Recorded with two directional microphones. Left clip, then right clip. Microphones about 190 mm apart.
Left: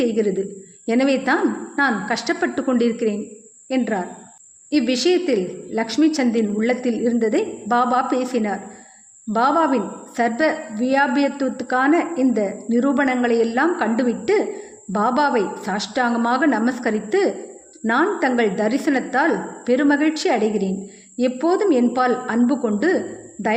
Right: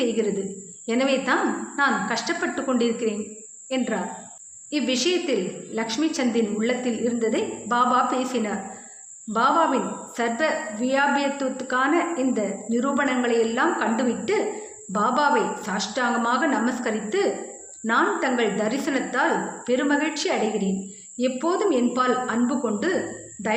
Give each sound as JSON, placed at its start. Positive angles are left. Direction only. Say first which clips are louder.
{"t": 0.0, "sound": "a woman's voice", "louder": "left 4 dB", "side_deg": 50}